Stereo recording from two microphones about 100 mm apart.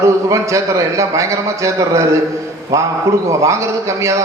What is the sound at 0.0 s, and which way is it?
A man's voice, 30° right (ahead or behind).